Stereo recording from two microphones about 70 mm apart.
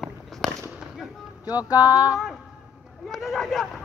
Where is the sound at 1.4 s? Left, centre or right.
Left.